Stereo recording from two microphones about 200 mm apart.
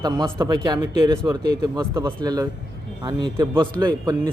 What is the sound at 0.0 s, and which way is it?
A man's voice, 20° right (ahead or behind).